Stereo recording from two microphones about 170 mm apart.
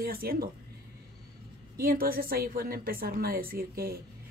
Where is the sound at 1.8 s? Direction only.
60° right (ahead or behind).